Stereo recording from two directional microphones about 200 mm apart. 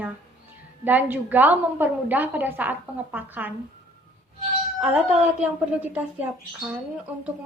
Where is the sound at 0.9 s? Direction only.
10° right (ahead or behind).